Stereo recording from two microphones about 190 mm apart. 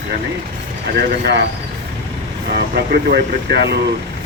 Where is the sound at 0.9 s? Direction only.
55° right (ahead or behind).